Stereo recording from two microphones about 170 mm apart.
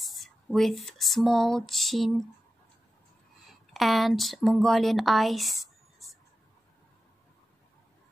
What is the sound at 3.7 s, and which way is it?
Speech, centre (ahead or behind).